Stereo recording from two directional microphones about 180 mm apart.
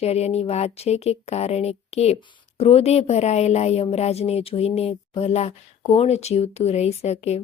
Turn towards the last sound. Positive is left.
turn(degrees=35)  # may be behind; listen again after turning